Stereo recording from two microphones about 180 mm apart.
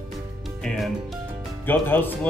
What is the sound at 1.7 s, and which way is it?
Speech, 10° left (ahead or behind).